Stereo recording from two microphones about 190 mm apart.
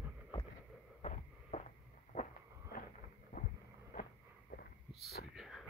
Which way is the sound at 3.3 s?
50° left (ahead or behind).